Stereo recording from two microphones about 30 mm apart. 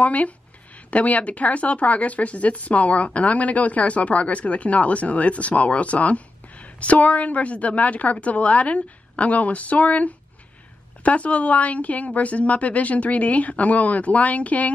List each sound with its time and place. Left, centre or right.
0.0 s speech: left